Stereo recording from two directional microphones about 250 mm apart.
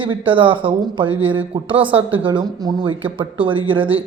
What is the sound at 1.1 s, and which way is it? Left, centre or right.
Speech, right.